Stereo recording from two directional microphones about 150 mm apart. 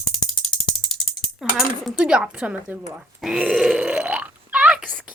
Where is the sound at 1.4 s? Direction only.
Centre (ahead or behind).